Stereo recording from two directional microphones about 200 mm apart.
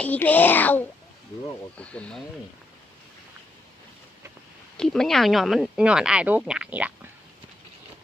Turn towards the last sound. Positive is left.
turn(degrees=-5)  # may be behind; listen again after turning